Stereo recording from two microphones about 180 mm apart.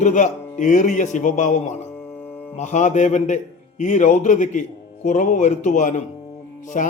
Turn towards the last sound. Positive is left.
turn(degrees=45)  # may be behind; listen again after turning